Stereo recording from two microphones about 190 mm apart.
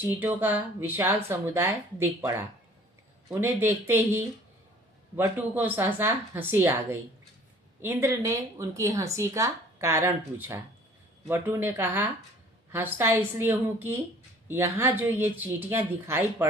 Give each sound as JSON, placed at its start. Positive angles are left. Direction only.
{"t": 0.1, "sound": "speech", "side_deg": -10}